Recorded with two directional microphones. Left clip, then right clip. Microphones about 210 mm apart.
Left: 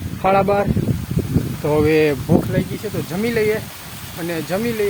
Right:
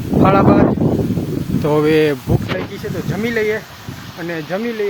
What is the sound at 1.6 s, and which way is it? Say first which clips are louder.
Speech: right 2 dB; 15° right (ahead or behind).